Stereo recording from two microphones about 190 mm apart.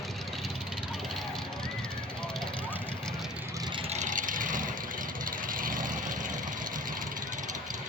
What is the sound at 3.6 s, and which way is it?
Vehicle, 25° right (ahead or behind).